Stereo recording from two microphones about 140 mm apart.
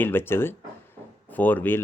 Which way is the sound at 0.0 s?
15° left (ahead or behind).